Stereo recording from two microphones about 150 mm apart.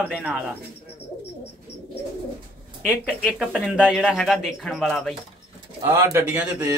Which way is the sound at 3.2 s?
Centre (ahead or behind).